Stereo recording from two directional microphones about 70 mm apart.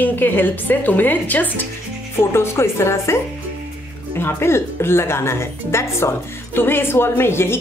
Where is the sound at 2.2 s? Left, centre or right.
Left.